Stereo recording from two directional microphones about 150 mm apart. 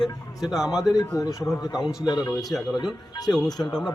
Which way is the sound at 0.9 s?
25° left (ahead or behind).